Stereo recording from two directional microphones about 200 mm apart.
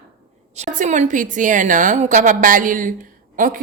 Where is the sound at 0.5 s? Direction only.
35° right (ahead or behind).